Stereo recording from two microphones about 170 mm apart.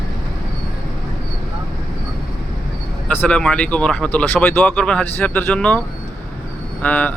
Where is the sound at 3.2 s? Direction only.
5° left (ahead or behind).